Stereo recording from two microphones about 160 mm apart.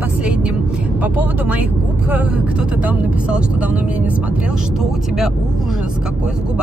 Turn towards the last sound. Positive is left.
turn(degrees=-5)  # may be behind; listen again after turning